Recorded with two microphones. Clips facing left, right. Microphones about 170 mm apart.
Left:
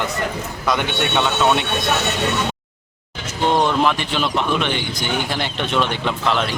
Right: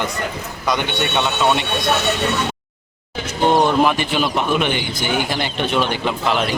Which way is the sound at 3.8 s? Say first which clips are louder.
Right 2 dB; 10° right (ahead or behind).